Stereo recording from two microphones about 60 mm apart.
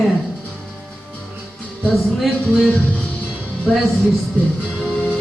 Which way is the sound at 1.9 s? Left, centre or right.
Centre.